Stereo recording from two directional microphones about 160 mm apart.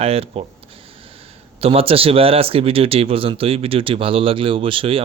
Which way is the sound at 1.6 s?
35° right (ahead or behind).